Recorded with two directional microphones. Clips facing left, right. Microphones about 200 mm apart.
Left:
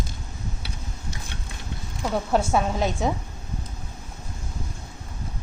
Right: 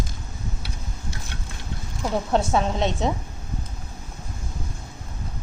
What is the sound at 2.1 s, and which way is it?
Speech, 5° left (ahead or behind).